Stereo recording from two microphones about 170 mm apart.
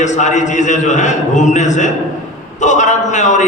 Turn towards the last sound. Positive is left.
turn(degrees=45)  # may be behind; listen again after turning